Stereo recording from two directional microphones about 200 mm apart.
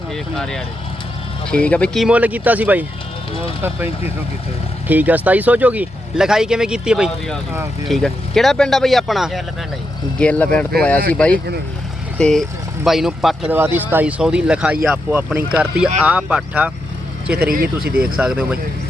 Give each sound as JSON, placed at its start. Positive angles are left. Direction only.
{"t": 0.3, "sound": "speech", "side_deg": 5}
{"t": 17.8, "sound": "speech", "side_deg": -50}
{"t": 18.2, "sound": "speech", "side_deg": -5}